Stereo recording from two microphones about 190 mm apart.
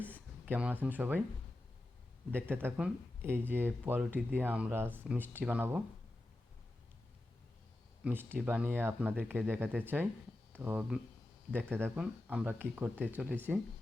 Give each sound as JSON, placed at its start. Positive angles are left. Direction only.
{"t": 0.4, "sound": "speech", "side_deg": -10}
{"t": 2.3, "sound": "speech", "side_deg": -10}
{"t": 8.0, "sound": "speech", "side_deg": -10}